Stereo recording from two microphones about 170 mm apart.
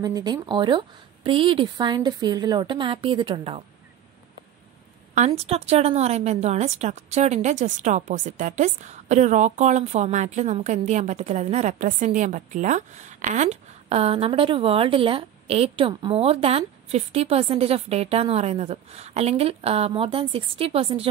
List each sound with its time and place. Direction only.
0.0 s a woman's voice: 25° right (ahead or behind)
5.1 s a woman's voice: 40° right (ahead or behind)